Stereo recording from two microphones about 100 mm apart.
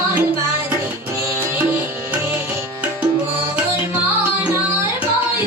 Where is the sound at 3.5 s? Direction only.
15° right (ahead or behind).